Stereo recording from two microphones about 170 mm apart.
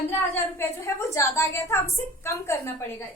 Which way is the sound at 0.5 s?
15° left (ahead or behind).